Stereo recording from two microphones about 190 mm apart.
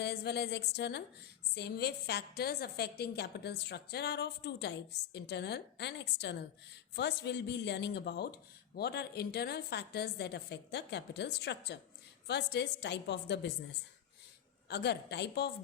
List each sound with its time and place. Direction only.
0.0 s speech: 60° left (ahead or behind)
14.7 s speech: 60° left (ahead or behind)